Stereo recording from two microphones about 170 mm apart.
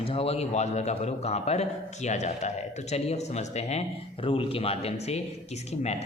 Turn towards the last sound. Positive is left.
turn(degrees=35)  # may be behind; listen again after turning